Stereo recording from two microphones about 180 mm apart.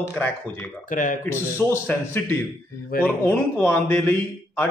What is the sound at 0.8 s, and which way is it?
Speech, 45° left (ahead or behind).